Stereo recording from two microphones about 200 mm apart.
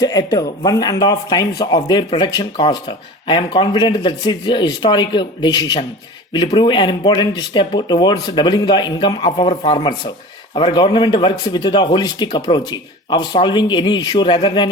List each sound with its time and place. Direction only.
0.0 s speech: 20° left (ahead or behind)